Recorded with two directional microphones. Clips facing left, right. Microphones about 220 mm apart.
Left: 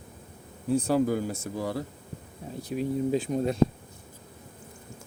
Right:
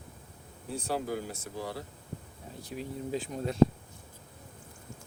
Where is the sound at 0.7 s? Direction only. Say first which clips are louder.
Left 9 dB; 45° left (ahead or behind).